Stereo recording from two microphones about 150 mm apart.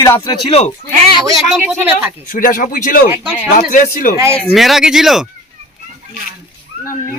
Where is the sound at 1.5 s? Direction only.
10° right (ahead or behind).